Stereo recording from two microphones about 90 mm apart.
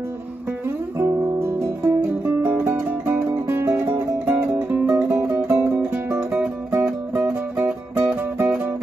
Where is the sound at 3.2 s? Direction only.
30° right (ahead or behind).